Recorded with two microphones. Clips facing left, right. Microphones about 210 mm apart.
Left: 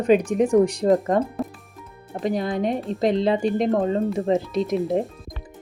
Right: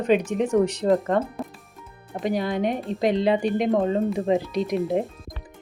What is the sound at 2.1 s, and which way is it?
Speech, centre (ahead or behind).